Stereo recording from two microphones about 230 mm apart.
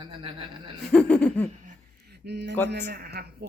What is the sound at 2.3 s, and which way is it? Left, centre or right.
A man's voice, right.